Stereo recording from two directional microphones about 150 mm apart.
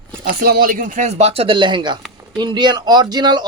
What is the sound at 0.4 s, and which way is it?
Speech, 80° right.